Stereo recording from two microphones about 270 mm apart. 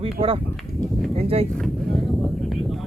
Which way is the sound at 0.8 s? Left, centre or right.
Centre.